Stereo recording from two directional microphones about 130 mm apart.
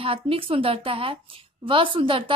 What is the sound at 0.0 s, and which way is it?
A woman's voice, 45° right (ahead or behind).